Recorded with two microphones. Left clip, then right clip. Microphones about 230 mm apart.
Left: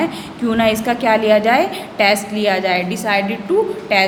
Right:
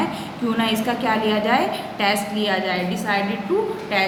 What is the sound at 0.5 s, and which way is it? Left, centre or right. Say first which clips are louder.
A woman's voice: left 7 dB; left.